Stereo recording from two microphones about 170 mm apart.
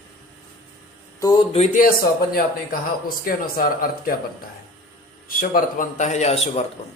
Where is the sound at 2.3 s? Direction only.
60° left (ahead or behind).